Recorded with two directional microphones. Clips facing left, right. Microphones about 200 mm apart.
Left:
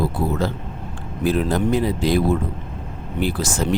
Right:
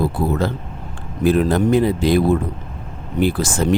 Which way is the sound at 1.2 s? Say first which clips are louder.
Right 4 dB; 55° right (ahead or behind).